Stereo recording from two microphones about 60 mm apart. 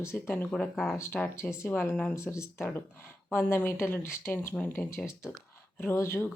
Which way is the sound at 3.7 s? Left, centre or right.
Left.